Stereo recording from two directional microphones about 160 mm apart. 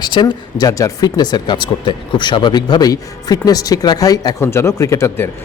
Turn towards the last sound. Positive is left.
turn(degrees=20)  # may be behind; listen again after turning